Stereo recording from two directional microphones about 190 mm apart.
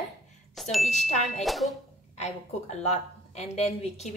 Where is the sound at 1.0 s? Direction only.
40° left (ahead or behind).